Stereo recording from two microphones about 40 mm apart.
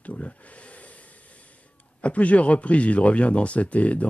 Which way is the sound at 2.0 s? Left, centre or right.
Left.